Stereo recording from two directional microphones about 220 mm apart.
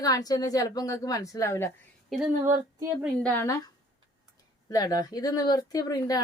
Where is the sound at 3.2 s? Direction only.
5° left (ahead or behind).